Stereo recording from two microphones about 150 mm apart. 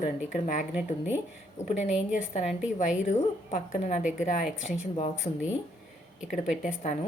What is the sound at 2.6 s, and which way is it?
Speech, 5° right (ahead or behind).